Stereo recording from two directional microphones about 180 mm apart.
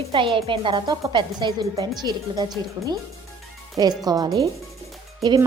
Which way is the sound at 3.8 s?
20° right (ahead or behind).